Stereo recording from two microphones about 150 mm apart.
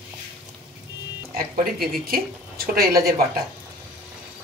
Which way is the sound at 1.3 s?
80° right.